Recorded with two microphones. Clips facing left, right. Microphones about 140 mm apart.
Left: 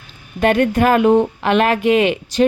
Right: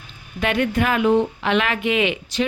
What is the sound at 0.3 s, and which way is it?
Speech, 45° left (ahead or behind).